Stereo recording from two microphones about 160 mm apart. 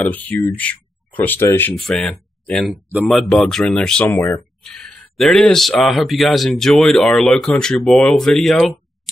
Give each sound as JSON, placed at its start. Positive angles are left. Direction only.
{"t": 0.1, "sound": "speech", "side_deg": 10}
{"t": 1.8, "sound": "speech", "side_deg": 5}
{"t": 2.6, "sound": "speech", "side_deg": -5}